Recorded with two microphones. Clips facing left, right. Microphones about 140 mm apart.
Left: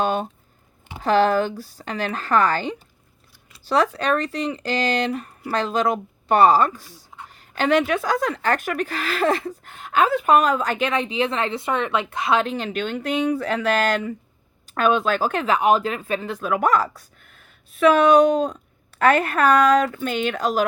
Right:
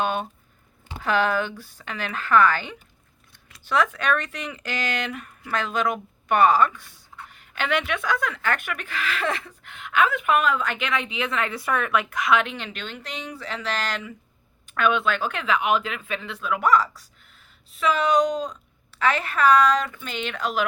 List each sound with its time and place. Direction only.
0.0 s speech: 40° left (ahead or behind)
14.7 s speech: 35° left (ahead or behind)